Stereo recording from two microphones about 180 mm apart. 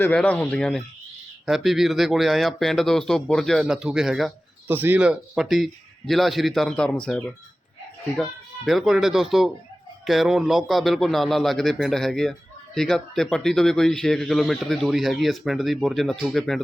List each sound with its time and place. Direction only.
0.0 s a man's voice: 5° left (ahead or behind)